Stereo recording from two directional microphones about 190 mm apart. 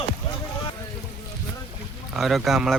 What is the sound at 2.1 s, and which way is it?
Speech, centre (ahead or behind).